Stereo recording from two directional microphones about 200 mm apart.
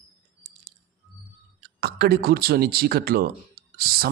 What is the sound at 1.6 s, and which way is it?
Speech, 50° right (ahead or behind).